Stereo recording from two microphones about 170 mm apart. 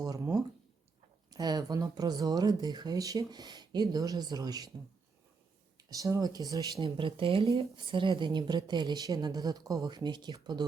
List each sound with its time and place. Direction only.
0.0 s a sound: 20° right (ahead or behind)
1.3 s speech: 25° right (ahead or behind)
5.9 s speech: 20° right (ahead or behind)